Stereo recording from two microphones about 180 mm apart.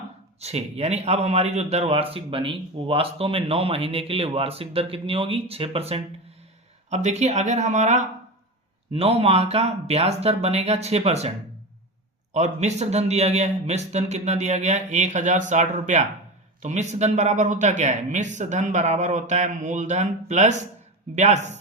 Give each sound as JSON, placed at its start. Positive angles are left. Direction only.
{"t": 0.3, "sound": "a man's voice", "side_deg": -35}
{"t": 12.3, "sound": "a man's voice", "side_deg": -40}